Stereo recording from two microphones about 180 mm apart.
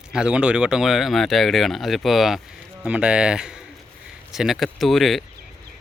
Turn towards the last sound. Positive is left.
turn(degrees=0)  # may be behind; listen again after turning